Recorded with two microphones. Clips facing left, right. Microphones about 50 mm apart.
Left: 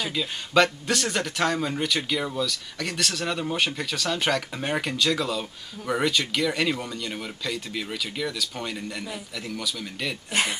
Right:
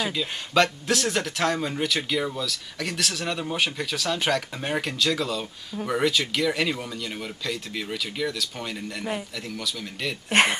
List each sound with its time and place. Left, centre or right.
0.0 s speech: centre
10.3 s speech: right